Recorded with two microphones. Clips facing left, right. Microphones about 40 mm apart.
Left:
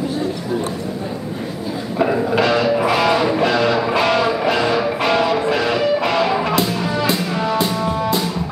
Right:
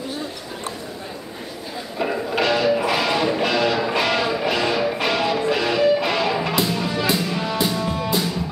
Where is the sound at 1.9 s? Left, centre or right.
Centre.